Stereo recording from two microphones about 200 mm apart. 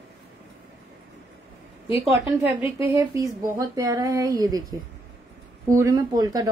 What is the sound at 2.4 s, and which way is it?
A woman's voice, 15° right (ahead or behind).